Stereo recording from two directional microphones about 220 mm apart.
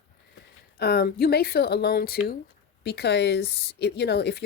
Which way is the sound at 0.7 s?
45° left (ahead or behind).